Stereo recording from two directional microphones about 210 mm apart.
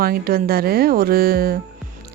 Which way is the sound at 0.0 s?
45° right (ahead or behind).